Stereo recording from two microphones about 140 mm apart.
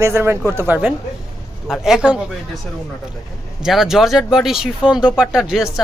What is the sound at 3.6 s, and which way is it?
Speech, 5° right (ahead or behind).